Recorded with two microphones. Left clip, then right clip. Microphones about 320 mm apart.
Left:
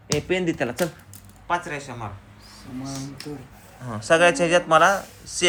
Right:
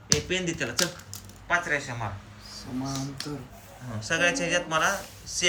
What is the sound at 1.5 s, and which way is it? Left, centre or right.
Speech, centre.